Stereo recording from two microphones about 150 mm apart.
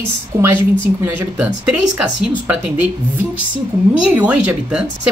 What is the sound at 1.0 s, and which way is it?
Speech, 10° right (ahead or behind).